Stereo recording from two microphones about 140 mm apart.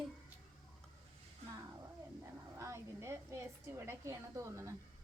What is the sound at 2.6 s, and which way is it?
A woman's voice, 20° right (ahead or behind).